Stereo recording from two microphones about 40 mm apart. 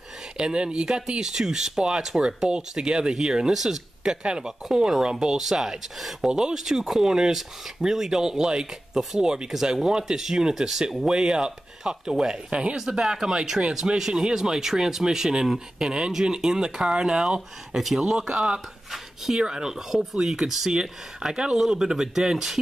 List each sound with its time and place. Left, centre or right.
0.4 s speech: right
12.4 s speech: right
12.7 s speech: centre
13.7 s speech: centre
17.7 s speech: centre
18.0 s speech: centre
18.9 s speech: centre